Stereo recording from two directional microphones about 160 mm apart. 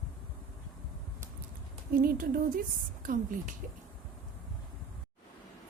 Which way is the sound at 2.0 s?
60° right (ahead or behind).